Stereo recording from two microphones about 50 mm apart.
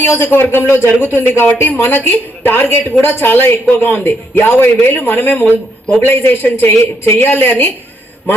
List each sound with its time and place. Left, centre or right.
0.3 s speech: left